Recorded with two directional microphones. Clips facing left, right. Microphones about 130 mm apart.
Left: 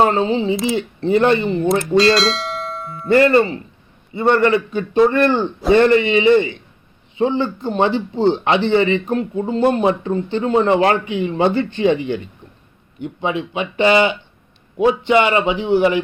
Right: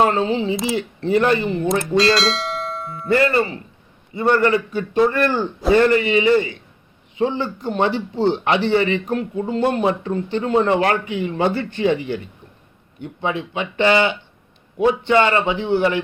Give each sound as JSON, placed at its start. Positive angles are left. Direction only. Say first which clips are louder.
{"t": 0.0, "sound": "a man's voice", "louder": "left 2 dB", "side_deg": 30}
{"t": 2.0, "sound": "bell", "louder": "left 3 dB", "side_deg": 0}
{"t": 3.1, "sound": "a man's voice", "louder": "left 5 dB", "side_deg": 25}